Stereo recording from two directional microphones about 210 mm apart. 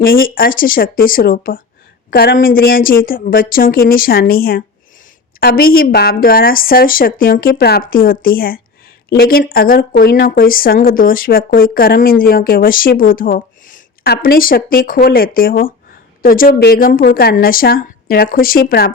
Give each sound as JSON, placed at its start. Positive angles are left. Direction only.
{"t": 0.0, "sound": "speech", "side_deg": 45}